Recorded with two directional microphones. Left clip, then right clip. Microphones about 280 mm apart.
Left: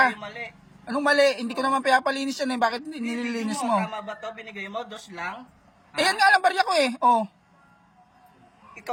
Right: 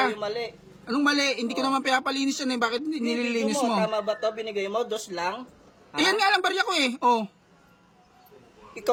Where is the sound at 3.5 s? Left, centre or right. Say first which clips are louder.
Left 2 dB; centre.